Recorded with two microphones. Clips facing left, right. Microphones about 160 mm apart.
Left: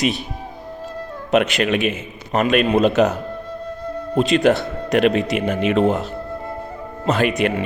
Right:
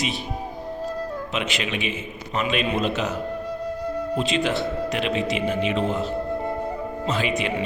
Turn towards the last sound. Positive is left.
turn(degrees=55)  # may be behind; listen again after turning